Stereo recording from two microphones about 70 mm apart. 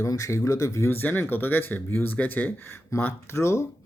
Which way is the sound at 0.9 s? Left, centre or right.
Left.